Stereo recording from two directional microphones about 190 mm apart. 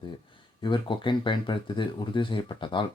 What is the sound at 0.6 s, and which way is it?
Speech, 25° left (ahead or behind).